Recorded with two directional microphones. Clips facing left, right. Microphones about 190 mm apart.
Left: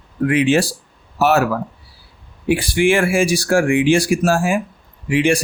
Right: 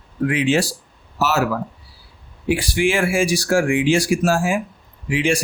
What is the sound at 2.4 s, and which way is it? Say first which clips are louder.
Speech: left 3 dB; 55° left (ahead or behind).